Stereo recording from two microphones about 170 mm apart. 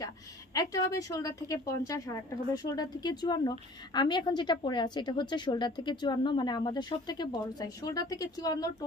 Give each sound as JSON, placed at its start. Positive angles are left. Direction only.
{"t": 0.0, "sound": "a woman's voice", "side_deg": 20}